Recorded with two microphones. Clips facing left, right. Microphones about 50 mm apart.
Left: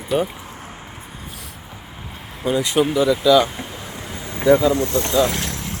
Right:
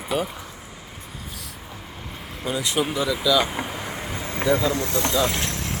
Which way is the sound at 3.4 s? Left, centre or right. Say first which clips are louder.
Left 2 dB; centre.